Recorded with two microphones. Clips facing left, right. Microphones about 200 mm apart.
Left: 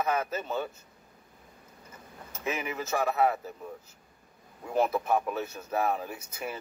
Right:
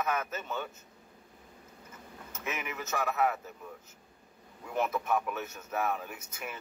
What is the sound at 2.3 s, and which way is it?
A man's voice, 30° left (ahead or behind).